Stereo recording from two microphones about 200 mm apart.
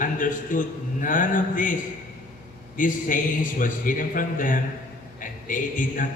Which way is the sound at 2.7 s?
40° left (ahead or behind).